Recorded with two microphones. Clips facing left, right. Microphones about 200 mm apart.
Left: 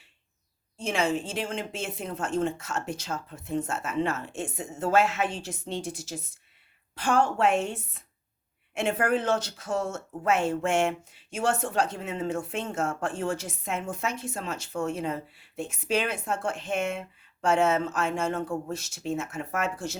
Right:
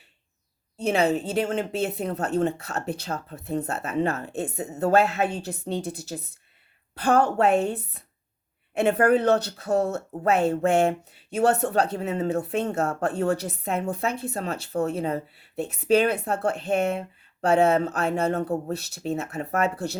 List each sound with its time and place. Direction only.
0.8 s speech: 40° right (ahead or behind)
5.8 s a woman's voice: 60° right (ahead or behind)
7.3 s speech: 35° right (ahead or behind)